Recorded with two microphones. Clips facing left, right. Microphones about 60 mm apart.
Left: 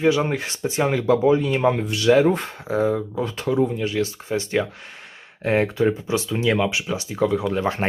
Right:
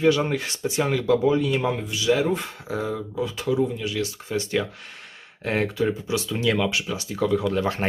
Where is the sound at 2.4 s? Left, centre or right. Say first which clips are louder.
Left 7 dB; left.